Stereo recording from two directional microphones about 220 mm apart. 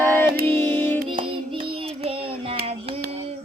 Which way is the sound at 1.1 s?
25° right (ahead or behind).